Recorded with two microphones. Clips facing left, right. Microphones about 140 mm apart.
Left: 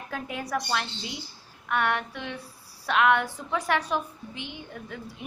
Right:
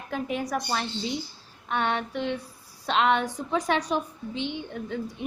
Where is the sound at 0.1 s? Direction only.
20° right (ahead or behind).